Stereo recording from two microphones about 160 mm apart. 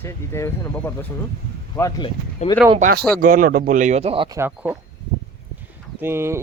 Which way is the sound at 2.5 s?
30° left (ahead or behind).